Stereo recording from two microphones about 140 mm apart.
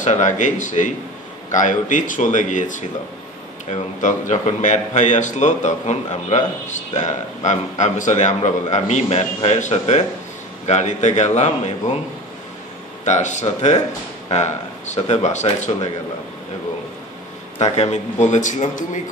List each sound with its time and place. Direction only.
0.0 s a man's voice: 60° left (ahead or behind)
3.7 s a man's voice: 55° left (ahead or behind)
13.0 s a man's voice: 55° left (ahead or behind)
17.6 s a man's voice: 50° left (ahead or behind)